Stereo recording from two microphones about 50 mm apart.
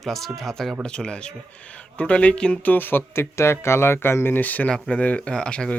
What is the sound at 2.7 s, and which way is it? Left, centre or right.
Speech, left.